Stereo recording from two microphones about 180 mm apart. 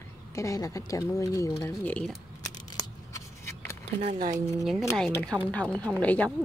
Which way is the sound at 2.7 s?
20° left (ahead or behind).